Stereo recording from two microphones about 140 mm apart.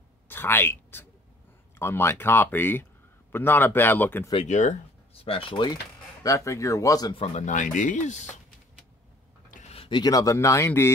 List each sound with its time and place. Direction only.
0.3 s speech: 15° left (ahead or behind)
4.5 s speech: 60° left (ahead or behind)
5.1 s speech: 40° left (ahead or behind)
6.2 s speech: 25° left (ahead or behind)
7.2 s speech: 50° left (ahead or behind)
9.5 s a sound: 60° left (ahead or behind)
9.8 s speech: 35° left (ahead or behind); by 10.9 s 15° left (ahead or behind)